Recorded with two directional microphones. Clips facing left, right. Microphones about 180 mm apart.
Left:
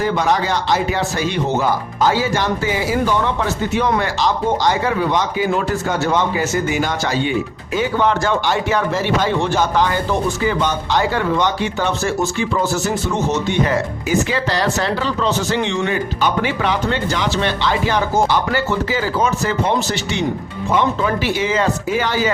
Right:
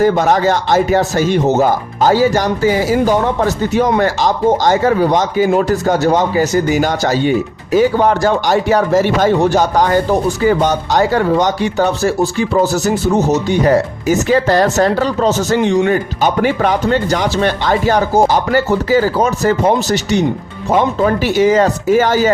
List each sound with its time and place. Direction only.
0.0 s speech: 45° right (ahead or behind)